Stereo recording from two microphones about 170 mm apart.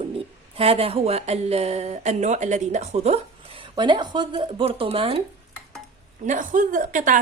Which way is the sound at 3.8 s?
25° right (ahead or behind).